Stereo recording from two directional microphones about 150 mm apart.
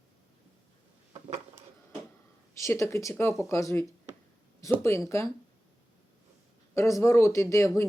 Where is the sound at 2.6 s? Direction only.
20° left (ahead or behind).